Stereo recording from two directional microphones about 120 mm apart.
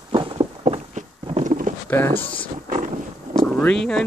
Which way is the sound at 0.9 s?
80° right.